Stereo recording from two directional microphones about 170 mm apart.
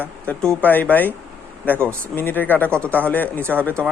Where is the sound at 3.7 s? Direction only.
5° left (ahead or behind).